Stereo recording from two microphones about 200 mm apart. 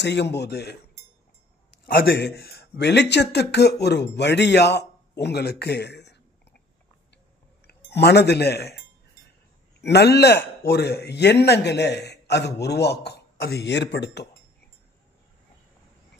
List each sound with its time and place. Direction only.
0.0 s a man's voice: 60° left (ahead or behind)
2.0 s a man's voice: 55° left (ahead or behind)
7.6 s speech: 55° left (ahead or behind)
9.8 s a man's voice: 55° left (ahead or behind)